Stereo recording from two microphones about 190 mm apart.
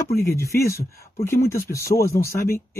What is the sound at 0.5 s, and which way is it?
Speech, 15° left (ahead or behind).